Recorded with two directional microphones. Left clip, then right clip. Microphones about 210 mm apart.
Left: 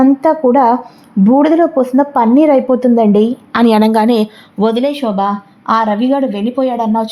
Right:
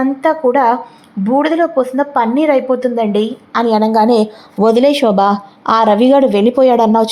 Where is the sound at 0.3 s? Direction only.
15° left (ahead or behind).